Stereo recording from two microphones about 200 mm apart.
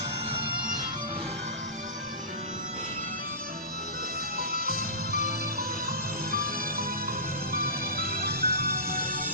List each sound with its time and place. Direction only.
4.4 s music: 45° right (ahead or behind)
7.5 s music: 45° right (ahead or behind)